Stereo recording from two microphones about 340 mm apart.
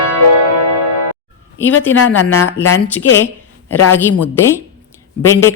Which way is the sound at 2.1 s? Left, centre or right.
Left.